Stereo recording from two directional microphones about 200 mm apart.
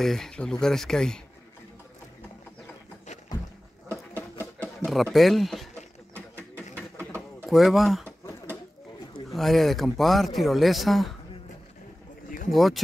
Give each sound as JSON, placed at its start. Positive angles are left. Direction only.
{"t": 0.0, "sound": "speech", "side_deg": 0}
{"t": 4.7, "sound": "speech", "side_deg": 0}
{"t": 6.1, "sound": "a sound", "side_deg": 5}
{"t": 7.4, "sound": "speech", "side_deg": 0}
{"t": 9.3, "sound": "speech", "side_deg": 0}
{"t": 12.4, "sound": "speech", "side_deg": 0}